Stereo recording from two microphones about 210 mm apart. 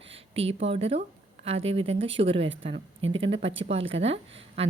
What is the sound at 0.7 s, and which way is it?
A woman's voice, 30° right (ahead or behind).